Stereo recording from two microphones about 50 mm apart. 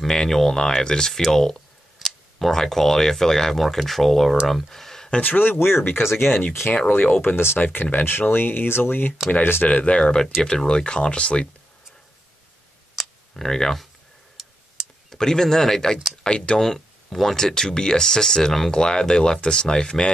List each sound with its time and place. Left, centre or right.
0.0 s speech: centre
4.5 s a sound: centre
5.2 s speech: left
6.7 s speech: left
7.2 s speech: left
9.7 s speech: left
13.0 s camera: centre
13.3 s speech: centre
15.0 s speech: centre
16.5 s speech: centre